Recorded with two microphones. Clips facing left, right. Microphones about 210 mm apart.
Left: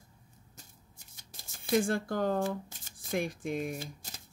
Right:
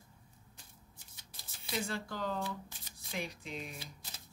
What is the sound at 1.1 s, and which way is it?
Speech, 45° left (ahead or behind).